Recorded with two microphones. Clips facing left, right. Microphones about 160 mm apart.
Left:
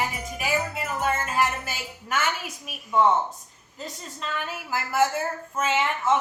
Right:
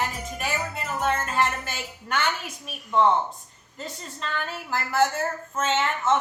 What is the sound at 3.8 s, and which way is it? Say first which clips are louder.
A woman's voice: even; centre (ahead or behind).